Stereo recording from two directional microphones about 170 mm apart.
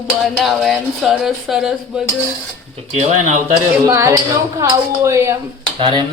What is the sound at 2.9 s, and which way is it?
Speech, 45° right (ahead or behind).